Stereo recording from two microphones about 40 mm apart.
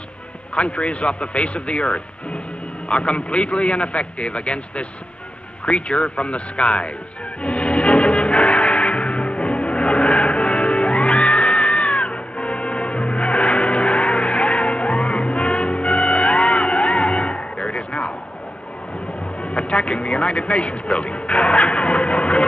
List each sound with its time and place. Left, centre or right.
0.6 s a man's voice: left
7.4 s music: left
19.4 s speech: left